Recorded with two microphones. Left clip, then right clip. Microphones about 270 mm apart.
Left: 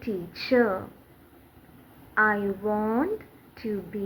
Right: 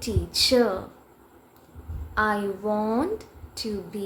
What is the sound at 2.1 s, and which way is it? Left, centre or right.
Speech, right.